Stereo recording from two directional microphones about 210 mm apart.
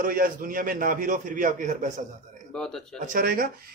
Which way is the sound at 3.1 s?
45° right (ahead or behind).